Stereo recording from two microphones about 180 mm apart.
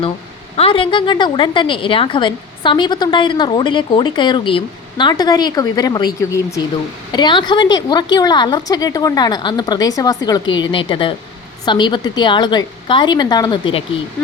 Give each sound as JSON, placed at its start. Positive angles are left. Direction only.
{"t": 0.5, "sound": "a woman's voice", "side_deg": 30}